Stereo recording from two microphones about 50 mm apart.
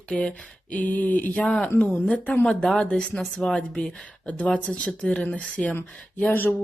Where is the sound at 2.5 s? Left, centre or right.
Centre.